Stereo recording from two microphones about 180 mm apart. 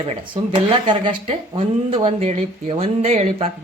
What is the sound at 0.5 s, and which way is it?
Speech, 25° right (ahead or behind).